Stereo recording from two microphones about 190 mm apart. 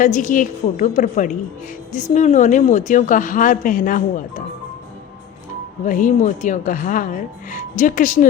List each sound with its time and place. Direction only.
0.0 s a woman's voice: 45° left (ahead or behind)
5.8 s speech: 45° left (ahead or behind)